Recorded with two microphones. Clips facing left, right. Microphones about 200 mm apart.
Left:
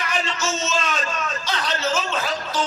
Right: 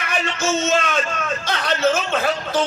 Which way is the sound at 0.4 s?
60° right (ahead or behind).